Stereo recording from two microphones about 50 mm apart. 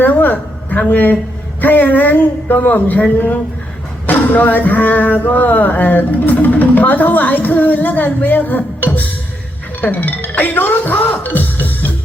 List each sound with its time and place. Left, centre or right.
0.0 s a sound: left
1.6 s speech: left
11.2 s music: left